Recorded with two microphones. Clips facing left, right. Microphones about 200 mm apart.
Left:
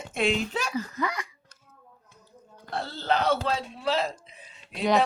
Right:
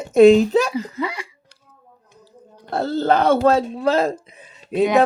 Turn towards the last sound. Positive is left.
turn(degrees=-50)  # may be behind; listen again after turning